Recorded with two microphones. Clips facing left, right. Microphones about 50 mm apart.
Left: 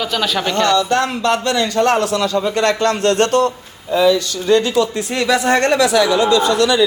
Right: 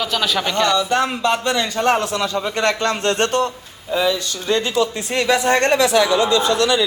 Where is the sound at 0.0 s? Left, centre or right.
Centre.